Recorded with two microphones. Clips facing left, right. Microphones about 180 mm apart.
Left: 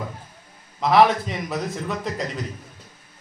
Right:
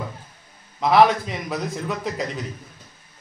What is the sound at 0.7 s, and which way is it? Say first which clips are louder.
A man's voice: right 1 dB; centre (ahead or behind).